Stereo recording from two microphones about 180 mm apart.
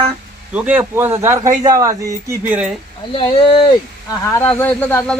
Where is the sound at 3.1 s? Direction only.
30° left (ahead or behind).